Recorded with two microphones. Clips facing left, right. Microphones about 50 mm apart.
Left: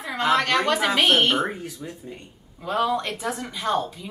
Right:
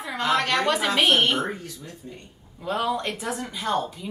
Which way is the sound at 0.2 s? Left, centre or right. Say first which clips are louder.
Left 2 dB; centre.